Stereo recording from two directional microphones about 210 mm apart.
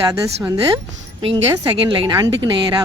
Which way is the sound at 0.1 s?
15° right (ahead or behind).